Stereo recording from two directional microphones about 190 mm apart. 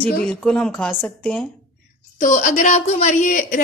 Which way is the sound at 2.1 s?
40° left (ahead or behind).